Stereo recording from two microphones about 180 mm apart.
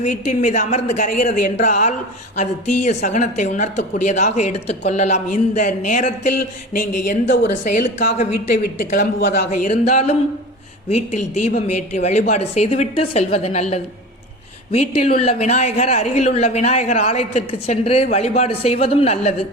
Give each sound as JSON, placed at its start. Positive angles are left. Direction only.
{"t": 0.0, "sound": "a woman's voice", "side_deg": 45}
{"t": 7.4, "sound": "a woman's voice", "side_deg": 45}
{"t": 8.8, "sound": "a woman's voice", "side_deg": 50}
{"t": 9.5, "sound": "a man's voice", "side_deg": 40}